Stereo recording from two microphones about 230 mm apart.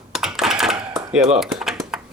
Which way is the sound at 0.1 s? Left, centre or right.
Centre.